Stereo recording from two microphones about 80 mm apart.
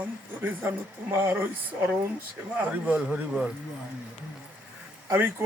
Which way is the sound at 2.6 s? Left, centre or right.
Centre.